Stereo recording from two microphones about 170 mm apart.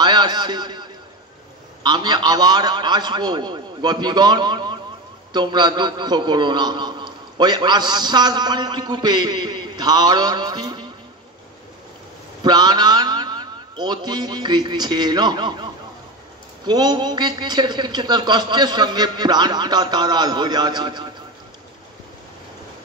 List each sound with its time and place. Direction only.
0.0 s a sound: 25° right (ahead or behind)
1.8 s a man's voice: 25° right (ahead or behind)
12.4 s a man's voice: 25° right (ahead or behind)